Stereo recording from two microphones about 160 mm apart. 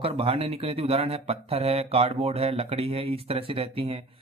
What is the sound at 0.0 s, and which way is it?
A man's voice, 35° right (ahead or behind).